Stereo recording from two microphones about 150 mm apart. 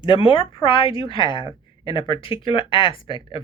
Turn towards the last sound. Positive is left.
turn(degrees=35)  # may be behind; listen again after turning